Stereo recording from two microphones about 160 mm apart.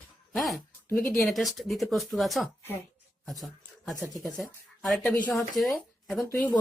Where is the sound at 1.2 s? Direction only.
Centre (ahead or behind).